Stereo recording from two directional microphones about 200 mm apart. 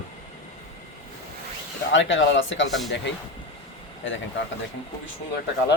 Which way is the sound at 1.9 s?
70° left (ahead or behind).